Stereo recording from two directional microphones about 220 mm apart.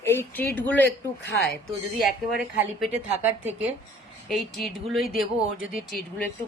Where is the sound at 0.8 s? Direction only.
50° left (ahead or behind).